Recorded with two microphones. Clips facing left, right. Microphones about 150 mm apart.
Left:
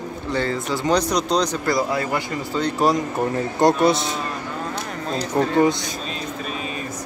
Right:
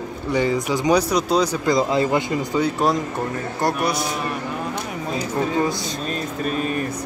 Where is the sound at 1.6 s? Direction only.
20° right (ahead or behind).